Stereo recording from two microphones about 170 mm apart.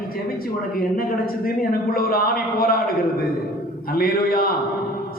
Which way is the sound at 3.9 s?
60° left (ahead or behind).